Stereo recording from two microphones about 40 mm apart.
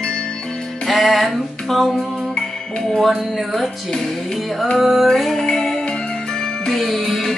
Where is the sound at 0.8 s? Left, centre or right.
Centre.